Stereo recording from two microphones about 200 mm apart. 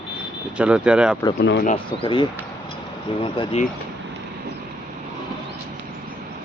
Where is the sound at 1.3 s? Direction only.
50° left (ahead or behind).